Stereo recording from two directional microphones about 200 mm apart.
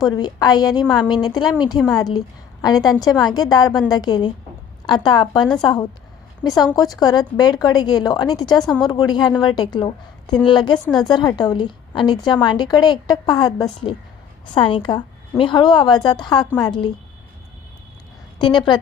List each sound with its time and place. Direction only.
0.0 s a woman's voice: 20° left (ahead or behind)
18.3 s a woman's voice: 20° left (ahead or behind)